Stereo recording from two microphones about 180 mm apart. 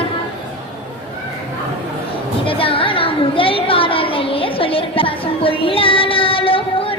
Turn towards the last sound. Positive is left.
turn(degrees=30)  # may be behind; listen again after turning